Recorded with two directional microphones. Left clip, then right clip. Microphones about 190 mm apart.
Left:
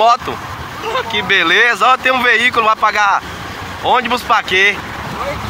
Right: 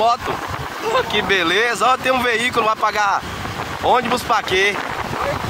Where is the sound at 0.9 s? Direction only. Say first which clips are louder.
Left 3 dB; 40° right (ahead or behind).